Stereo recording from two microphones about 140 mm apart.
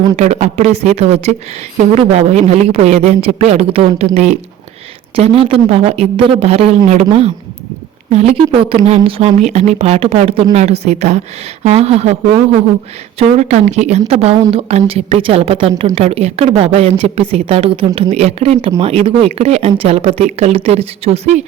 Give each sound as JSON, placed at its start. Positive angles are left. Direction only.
{"t": 0.2, "sound": "a woman's voice", "side_deg": -55}
{"t": 5.1, "sound": "a woman's voice", "side_deg": -40}